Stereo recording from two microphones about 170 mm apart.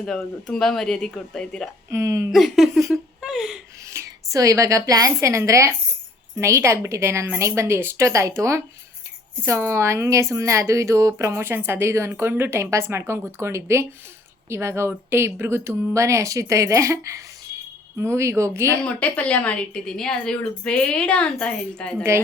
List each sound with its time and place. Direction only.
0.0 s a woman's voice: 5° left (ahead or behind)
1.9 s speech: 20° right (ahead or behind)
2.3 s a woman's voice: centre (ahead or behind)
2.9 s a sound: centre (ahead or behind)
3.8 s a woman's voice: 20° right (ahead or behind)
18.8 s a woman's voice: 10° left (ahead or behind)